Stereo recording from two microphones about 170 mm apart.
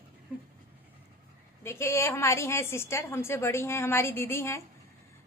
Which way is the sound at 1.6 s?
15° left (ahead or behind).